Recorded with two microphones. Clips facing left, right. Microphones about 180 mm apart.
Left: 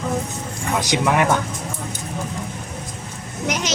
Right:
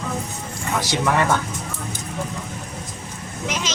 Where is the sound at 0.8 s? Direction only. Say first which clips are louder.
Left 2 dB; 20° left (ahead or behind).